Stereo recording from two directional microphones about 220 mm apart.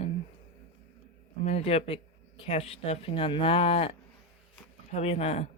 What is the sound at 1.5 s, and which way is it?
Speech, 30° left (ahead or behind).